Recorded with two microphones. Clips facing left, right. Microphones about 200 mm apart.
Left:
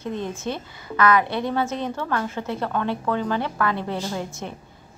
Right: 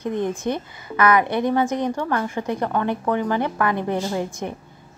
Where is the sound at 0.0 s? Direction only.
15° right (ahead or behind).